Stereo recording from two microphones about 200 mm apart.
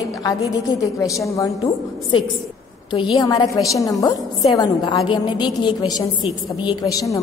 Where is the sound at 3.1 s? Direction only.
20° left (ahead or behind).